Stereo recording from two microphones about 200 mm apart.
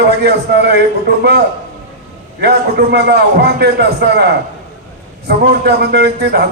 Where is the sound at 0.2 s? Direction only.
55° right (ahead or behind).